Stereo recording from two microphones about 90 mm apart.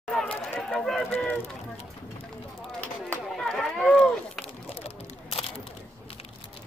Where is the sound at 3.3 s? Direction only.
5° left (ahead or behind).